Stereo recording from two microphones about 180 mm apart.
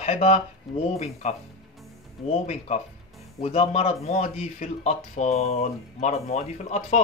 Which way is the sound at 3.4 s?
35° left (ahead or behind).